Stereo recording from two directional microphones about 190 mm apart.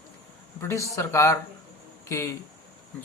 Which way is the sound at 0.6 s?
15° left (ahead or behind).